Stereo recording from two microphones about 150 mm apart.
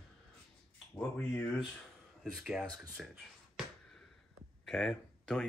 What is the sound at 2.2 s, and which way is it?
Speech, centre (ahead or behind).